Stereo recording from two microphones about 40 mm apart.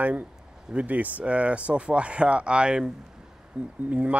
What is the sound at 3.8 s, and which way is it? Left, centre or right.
Speech, right.